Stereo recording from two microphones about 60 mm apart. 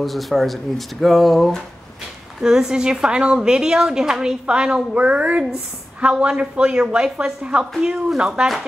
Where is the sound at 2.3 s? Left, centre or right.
Centre.